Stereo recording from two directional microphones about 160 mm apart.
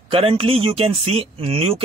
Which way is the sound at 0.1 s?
35° right (ahead or behind).